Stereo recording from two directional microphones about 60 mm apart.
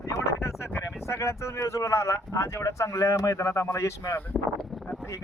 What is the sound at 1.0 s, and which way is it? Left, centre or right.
Speech, left.